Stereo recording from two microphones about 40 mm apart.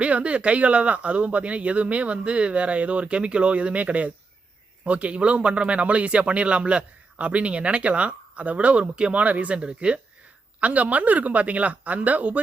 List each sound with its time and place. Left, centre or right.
0.0 s speech: right
10.6 s speech: right